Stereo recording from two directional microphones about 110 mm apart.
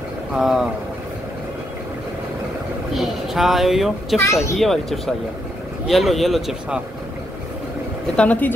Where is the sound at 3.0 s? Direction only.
Centre (ahead or behind).